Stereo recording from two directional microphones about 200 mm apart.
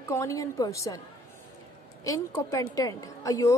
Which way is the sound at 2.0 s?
15° left (ahead or behind).